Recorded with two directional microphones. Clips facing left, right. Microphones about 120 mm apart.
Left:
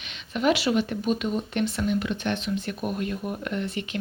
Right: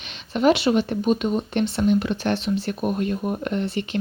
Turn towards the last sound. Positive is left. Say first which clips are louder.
# right 5 dB
turn(degrees=-30)  # may be behind; listen again after turning